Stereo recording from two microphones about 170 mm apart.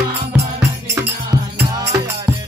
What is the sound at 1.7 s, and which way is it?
Music, 20° right (ahead or behind).